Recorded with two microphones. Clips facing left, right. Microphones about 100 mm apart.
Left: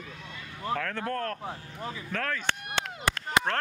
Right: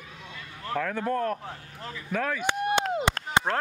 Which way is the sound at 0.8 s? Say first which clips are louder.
Right 4 dB; 10° right (ahead or behind).